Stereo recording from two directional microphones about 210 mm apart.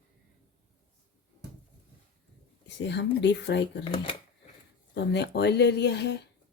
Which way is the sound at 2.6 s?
55° left (ahead or behind).